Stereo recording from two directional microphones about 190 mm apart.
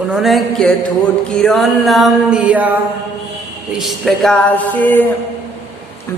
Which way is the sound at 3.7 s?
Centre (ahead or behind).